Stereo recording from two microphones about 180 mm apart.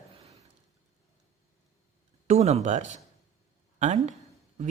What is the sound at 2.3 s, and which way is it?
Speech, 35° right (ahead or behind).